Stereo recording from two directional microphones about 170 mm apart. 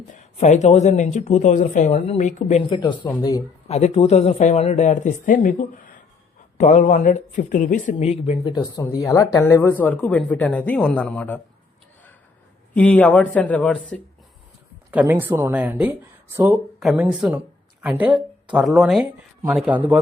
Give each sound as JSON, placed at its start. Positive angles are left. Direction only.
{"t": 0.1, "sound": "speech", "side_deg": 45}
{"t": 2.6, "sound": "speech", "side_deg": 25}
{"t": 3.7, "sound": "speech", "side_deg": 40}
{"t": 12.7, "sound": "speech", "side_deg": 10}
{"t": 14.8, "sound": "speech", "side_deg": -10}
{"t": 18.5, "sound": "speech", "side_deg": 0}